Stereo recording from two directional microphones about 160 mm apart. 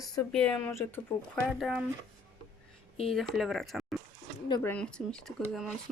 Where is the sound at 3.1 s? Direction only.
Centre (ahead or behind).